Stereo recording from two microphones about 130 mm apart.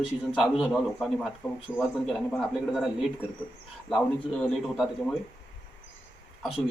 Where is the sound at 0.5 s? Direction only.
Centre (ahead or behind).